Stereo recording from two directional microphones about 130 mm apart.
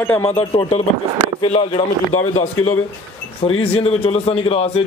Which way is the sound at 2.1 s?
55° left (ahead or behind).